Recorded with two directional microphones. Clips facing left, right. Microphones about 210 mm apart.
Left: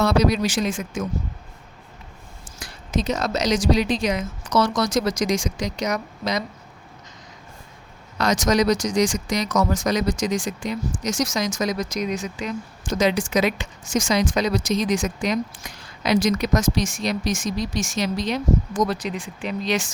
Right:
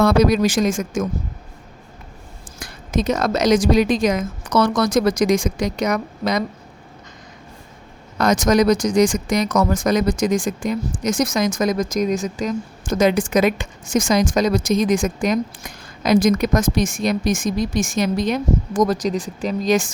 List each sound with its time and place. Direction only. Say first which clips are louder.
0.0 s speech: right 4 dB; 50° right (ahead or behind)
2.6 s speech: right 4 dB; 50° right (ahead or behind)
8.2 s speech: right 4 dB; 55° right (ahead or behind)